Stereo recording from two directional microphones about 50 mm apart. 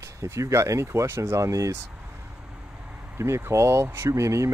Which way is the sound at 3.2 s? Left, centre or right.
Right.